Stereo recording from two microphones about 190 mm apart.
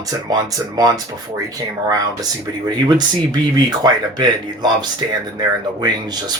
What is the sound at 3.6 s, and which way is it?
Speech, 20° right (ahead or behind).